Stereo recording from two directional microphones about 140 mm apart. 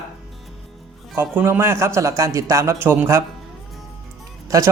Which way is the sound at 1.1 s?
15° right (ahead or behind).